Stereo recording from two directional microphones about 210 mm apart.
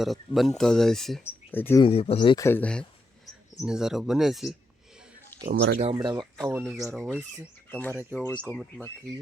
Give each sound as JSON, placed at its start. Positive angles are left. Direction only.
{"t": 0.0, "sound": "speech", "side_deg": 0}
{"t": 1.8, "sound": "speech", "side_deg": 30}
{"t": 5.3, "sound": "a sound", "side_deg": 10}
{"t": 5.7, "sound": "speech", "side_deg": -25}
{"t": 6.5, "sound": "speech", "side_deg": -5}
{"t": 7.7, "sound": "speech", "side_deg": 5}